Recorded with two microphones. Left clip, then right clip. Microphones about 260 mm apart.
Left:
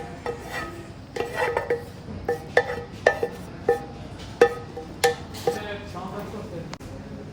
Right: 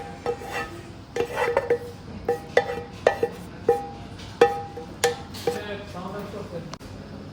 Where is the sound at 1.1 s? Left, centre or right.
Centre.